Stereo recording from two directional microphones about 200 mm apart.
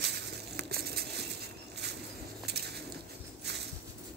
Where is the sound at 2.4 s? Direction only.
55° right (ahead or behind).